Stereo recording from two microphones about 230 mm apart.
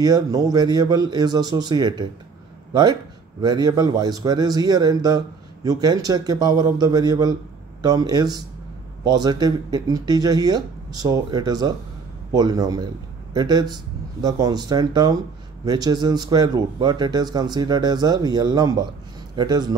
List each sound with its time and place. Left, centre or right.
0.0 s a man's voice: centre